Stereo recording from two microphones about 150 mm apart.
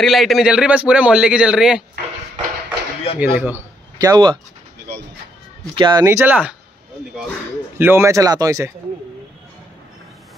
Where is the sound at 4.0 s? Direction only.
25° right (ahead or behind).